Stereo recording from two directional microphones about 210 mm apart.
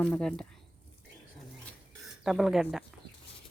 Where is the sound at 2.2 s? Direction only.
Centre (ahead or behind).